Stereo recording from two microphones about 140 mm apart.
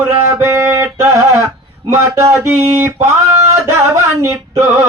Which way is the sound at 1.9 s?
20° right (ahead or behind).